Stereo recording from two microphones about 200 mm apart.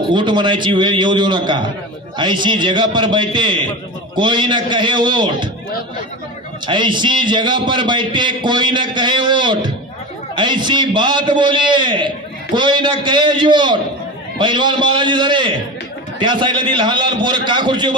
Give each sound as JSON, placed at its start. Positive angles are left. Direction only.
{"t": 0.1, "sound": "a man's voice", "side_deg": -25}
{"t": 6.6, "sound": "a man's voice", "side_deg": -25}